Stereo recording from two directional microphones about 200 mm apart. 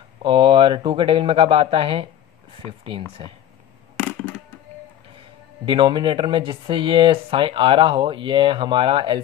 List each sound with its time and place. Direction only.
0.2 s speech: 25° right (ahead or behind)
5.7 s speech: 25° right (ahead or behind)